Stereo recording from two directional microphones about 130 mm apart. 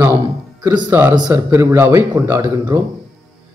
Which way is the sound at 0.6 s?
35° right (ahead or behind).